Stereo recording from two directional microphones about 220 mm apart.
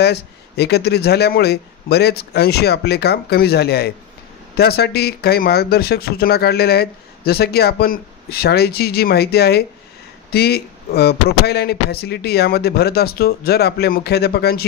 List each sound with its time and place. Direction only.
0.0 s speech: 50° left (ahead or behind)